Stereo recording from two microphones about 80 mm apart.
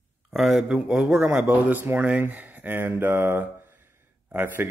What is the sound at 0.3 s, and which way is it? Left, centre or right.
Speech, centre.